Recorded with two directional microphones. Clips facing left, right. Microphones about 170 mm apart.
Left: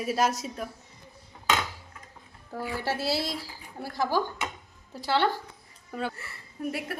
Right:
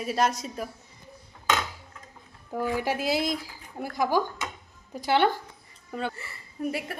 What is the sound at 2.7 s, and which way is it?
A woman's voice, 15° right (ahead or behind).